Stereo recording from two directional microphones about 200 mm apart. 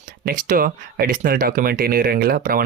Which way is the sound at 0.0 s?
45° right (ahead or behind).